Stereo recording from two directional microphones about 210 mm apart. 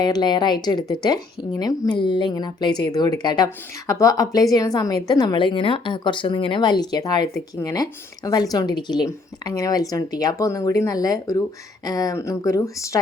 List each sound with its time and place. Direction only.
0.0 s a woman's voice: 20° left (ahead or behind)